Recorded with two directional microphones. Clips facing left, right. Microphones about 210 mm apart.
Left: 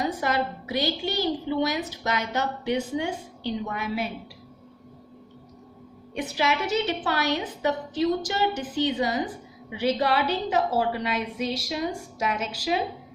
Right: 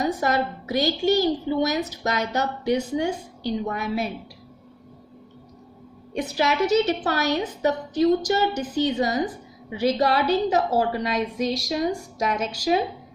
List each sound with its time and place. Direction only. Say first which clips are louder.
0.0 s a woman's voice: right 3 dB; 45° right (ahead or behind)
6.1 s a woman's voice: right 3 dB; 40° right (ahead or behind)